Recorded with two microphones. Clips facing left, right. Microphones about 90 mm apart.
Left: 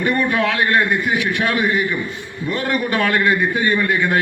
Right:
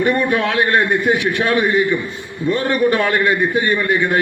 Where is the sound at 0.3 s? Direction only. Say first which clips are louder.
Right 2 dB; 25° right (ahead or behind).